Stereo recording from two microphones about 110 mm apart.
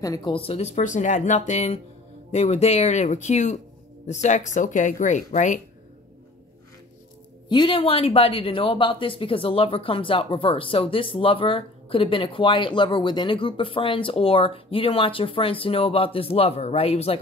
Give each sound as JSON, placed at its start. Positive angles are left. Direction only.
{"t": 0.0, "sound": "speech", "side_deg": 35}
{"t": 0.3, "sound": "speech", "side_deg": 60}
{"t": 7.4, "sound": "speech", "side_deg": 50}